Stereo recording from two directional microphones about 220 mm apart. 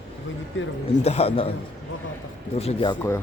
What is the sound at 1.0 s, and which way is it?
Speech, 25° left (ahead or behind).